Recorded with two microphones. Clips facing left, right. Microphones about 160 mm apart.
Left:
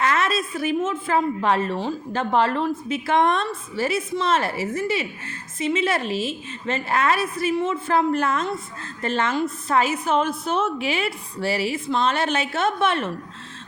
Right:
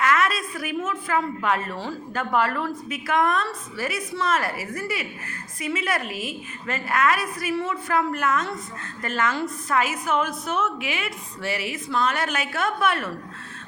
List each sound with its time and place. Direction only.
0.0 s a woman's voice: 25° left (ahead or behind)